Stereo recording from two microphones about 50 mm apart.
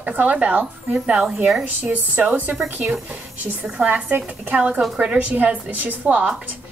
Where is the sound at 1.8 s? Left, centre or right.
Right.